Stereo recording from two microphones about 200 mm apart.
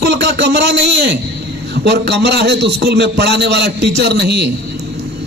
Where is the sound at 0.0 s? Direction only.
55° right (ahead or behind).